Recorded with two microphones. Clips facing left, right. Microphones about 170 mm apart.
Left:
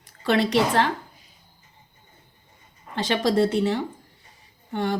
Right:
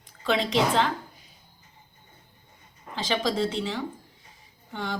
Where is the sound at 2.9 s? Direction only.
60° left (ahead or behind).